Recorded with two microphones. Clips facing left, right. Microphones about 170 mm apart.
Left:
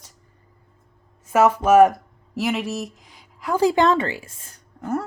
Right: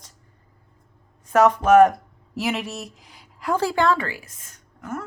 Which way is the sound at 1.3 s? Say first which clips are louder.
Even; 5° left (ahead or behind).